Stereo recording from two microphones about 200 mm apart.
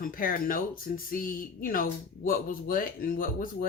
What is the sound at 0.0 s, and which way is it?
Speech, 45° left (ahead or behind).